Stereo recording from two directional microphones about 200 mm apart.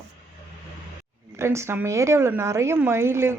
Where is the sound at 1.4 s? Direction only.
15° right (ahead or behind).